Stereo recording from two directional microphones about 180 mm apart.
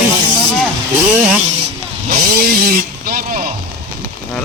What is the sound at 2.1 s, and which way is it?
Vehicle, 60° right (ahead or behind).